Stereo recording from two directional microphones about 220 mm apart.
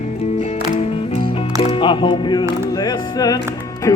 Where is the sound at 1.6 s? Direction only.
20° left (ahead or behind).